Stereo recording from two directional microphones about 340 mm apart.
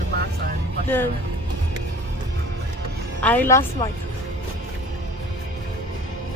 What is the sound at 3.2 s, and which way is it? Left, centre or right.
Speech, centre.